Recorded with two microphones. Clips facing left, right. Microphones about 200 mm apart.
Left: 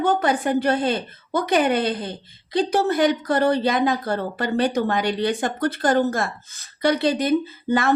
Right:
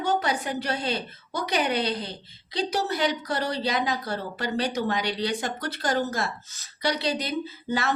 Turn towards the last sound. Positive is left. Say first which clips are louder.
# left 6 dB
turn(degrees=55)  # may be behind; listen again after turning